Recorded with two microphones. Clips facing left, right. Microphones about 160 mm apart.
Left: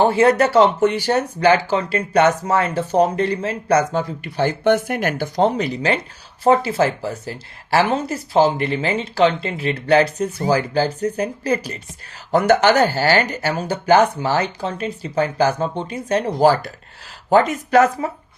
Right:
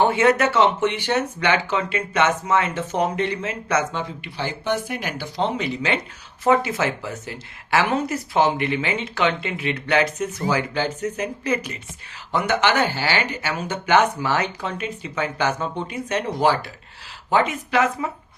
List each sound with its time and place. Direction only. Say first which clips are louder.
0.0 s speech: left 3 dB; 35° left (ahead or behind)